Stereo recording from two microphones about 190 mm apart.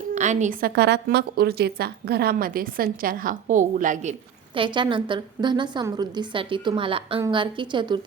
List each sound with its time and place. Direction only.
0.1 s a woman's voice: 40° right (ahead or behind)
0.8 s a woman's voice: 60° right (ahead or behind); by 4.1 s 40° right (ahead or behind)
4.5 s a woman's voice: 25° right (ahead or behind)